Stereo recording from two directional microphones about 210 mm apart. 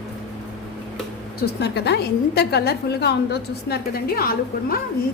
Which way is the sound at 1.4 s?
50° left (ahead or behind).